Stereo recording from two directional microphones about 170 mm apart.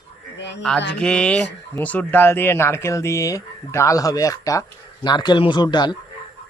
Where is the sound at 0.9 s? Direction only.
5° left (ahead or behind).